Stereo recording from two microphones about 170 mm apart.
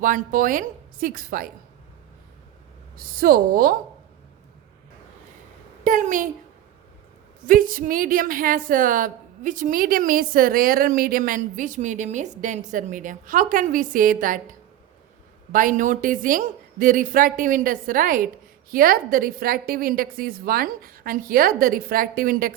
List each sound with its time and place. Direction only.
0.0 s speech: 50° right (ahead or behind)
3.0 s a woman's voice: 60° right (ahead or behind)
5.8 s a woman's voice: 50° right (ahead or behind)
7.4 s speech: 55° right (ahead or behind)
15.5 s a woman's voice: 50° right (ahead or behind)